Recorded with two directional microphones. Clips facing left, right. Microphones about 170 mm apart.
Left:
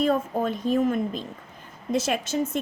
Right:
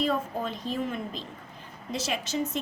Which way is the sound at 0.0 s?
50° left (ahead or behind).